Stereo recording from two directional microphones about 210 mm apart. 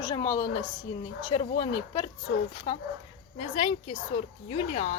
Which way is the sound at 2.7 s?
30° left (ahead or behind).